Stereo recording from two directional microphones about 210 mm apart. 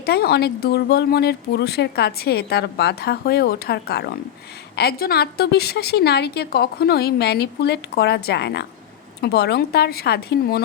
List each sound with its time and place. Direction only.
0.0 s speech: 50° left (ahead or behind)